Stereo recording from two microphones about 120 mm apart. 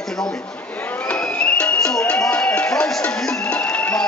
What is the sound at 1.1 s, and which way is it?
Music, 10° left (ahead or behind).